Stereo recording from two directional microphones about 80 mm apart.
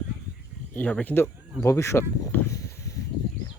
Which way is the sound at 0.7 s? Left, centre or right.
Centre.